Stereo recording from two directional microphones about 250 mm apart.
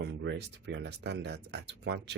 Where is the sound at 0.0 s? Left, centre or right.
Right.